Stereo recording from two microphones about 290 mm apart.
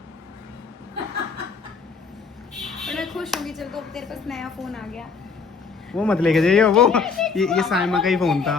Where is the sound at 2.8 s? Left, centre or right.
Centre.